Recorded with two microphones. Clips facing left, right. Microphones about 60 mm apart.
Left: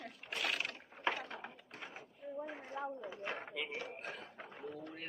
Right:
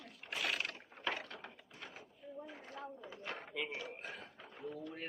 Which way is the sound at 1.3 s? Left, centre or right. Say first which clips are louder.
Left 3 dB; left.